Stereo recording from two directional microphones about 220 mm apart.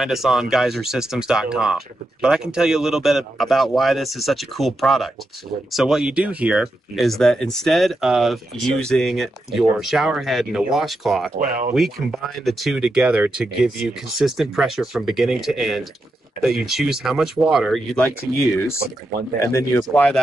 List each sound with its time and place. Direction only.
0.0 s speech: centre (ahead or behind)
11.3 s speech: 40° right (ahead or behind)
11.7 s speech: centre (ahead or behind)
19.8 s speech: centre (ahead or behind)